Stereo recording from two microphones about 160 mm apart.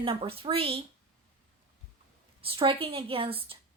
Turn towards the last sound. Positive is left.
turn(degrees=-35)  # may be behind; listen again after turning